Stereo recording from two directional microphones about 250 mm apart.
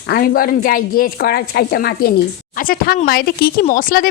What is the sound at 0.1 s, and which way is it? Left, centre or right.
A woman's voice, left.